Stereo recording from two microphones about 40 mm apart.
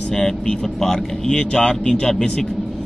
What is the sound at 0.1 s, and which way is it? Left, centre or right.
Speech, centre.